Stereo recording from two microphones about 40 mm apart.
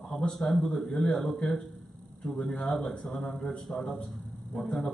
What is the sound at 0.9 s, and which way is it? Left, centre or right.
A man's voice, centre.